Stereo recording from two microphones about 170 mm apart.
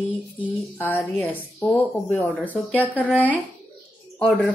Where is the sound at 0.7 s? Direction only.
10° left (ahead or behind).